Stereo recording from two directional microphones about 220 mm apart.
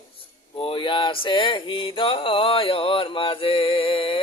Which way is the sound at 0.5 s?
20° left (ahead or behind).